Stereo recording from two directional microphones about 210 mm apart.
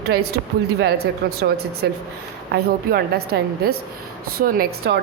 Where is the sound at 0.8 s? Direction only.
50° right (ahead or behind).